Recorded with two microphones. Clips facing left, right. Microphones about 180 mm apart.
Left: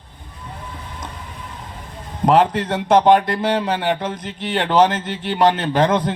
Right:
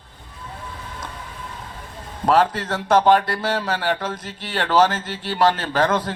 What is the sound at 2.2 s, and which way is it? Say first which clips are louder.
Speech: left 3 dB; 20° left (ahead or behind).